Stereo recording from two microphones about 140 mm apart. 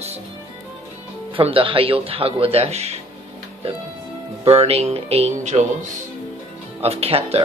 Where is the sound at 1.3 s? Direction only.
40° right (ahead or behind).